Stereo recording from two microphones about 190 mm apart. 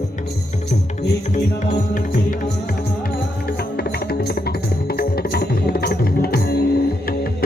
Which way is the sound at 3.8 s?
60° left (ahead or behind).